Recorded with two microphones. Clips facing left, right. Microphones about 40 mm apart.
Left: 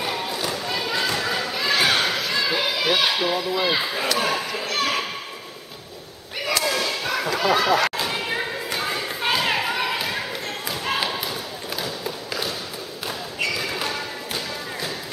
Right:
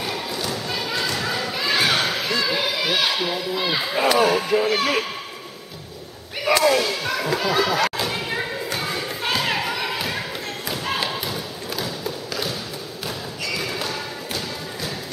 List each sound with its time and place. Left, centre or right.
0.0 s a sound: centre
3.9 s a child's voice: centre
4.2 s a child's voice: centre
4.5 s a child's voice: centre
6.4 s speech: centre
6.8 s a sound: centre
8.8 s thump: centre
13.6 s a sound: centre
13.9 s thump: centre